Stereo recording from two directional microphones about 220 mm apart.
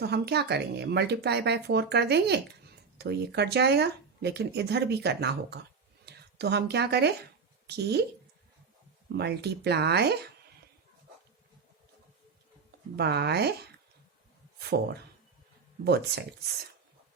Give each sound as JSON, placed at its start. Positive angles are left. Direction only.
{"t": 0.0, "sound": "a woman's voice", "side_deg": -50}
{"t": 9.1, "sound": "speech", "side_deg": -50}
{"t": 13.0, "sound": "speech", "side_deg": -50}
{"t": 14.6, "sound": "speech", "side_deg": -50}